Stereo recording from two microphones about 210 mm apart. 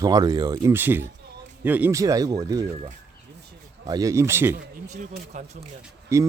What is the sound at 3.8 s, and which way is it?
Speech, 20° right (ahead or behind).